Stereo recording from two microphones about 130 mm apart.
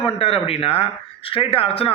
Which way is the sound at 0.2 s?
50° left (ahead or behind).